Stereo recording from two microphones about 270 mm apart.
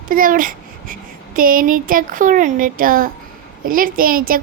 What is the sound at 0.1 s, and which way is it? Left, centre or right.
A child's voice, right.